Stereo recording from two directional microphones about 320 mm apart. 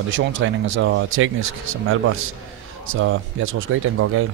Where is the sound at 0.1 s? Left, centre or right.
Right.